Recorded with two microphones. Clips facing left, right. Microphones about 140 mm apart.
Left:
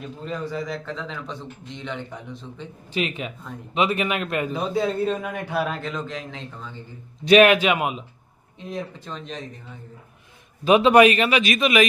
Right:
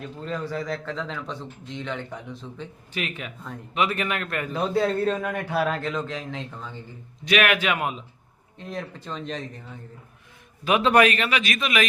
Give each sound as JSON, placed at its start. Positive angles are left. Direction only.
{"t": 0.7, "sound": "a man's voice", "side_deg": 0}
{"t": 2.9, "sound": "a man's voice", "side_deg": 20}
{"t": 4.5, "sound": "a man's voice", "side_deg": 0}
{"t": 7.3, "sound": "a man's voice", "side_deg": 30}
{"t": 7.6, "sound": "speech", "side_deg": 15}
{"t": 8.7, "sound": "a man's voice", "side_deg": 5}
{"t": 10.6, "sound": "a man's voice", "side_deg": 25}